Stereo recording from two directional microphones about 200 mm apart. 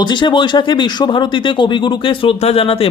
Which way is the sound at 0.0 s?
20° left (ahead or behind).